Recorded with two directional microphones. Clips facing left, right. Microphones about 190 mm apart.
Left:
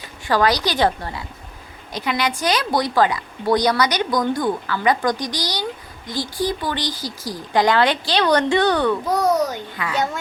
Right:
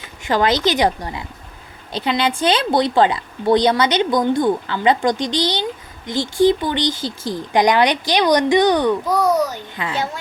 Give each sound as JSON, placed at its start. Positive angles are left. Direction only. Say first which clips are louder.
{"t": 0.3, "sound": "speech", "louder": "right 2 dB", "side_deg": -20}
{"t": 1.9, "sound": "speech", "louder": "right 3 dB", "side_deg": -30}